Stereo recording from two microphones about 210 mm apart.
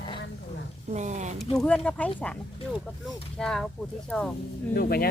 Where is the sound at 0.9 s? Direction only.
35° right (ahead or behind).